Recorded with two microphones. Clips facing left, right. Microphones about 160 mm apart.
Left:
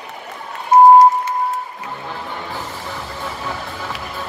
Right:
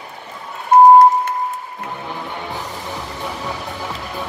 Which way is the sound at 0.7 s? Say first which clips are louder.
Even; 55° right (ahead or behind).